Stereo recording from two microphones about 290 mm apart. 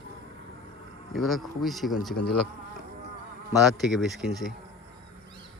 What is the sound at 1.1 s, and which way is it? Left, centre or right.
Speech, centre.